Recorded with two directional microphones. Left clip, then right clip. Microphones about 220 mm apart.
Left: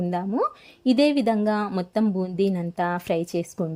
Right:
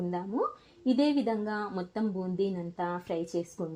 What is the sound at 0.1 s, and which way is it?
A woman's voice, 40° left (ahead or behind).